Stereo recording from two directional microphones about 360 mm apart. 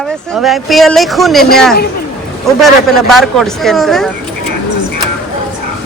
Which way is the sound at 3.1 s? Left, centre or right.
Centre.